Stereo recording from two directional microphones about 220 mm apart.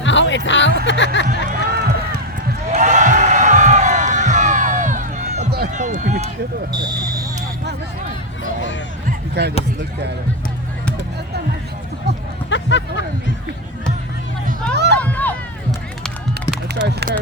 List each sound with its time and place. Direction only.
0.0 s music: 55° left (ahead or behind)
1.3 s a sound: 40° right (ahead or behind)
2.6 s crowd: 30° right (ahead or behind)
5.5 s run: 40° right (ahead or behind)
6.7 s speech: 20° right (ahead or behind)
9.0 s basketball bounce: 50° right (ahead or behind)
12.5 s a sound: 55° left (ahead or behind)
14.7 s music: 50° right (ahead or behind)
14.9 s a sound: 5° left (ahead or behind)
16.8 s speech: 50° right (ahead or behind)